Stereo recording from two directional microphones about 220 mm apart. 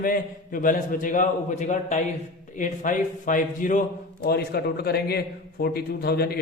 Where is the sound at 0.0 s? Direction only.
40° left (ahead or behind).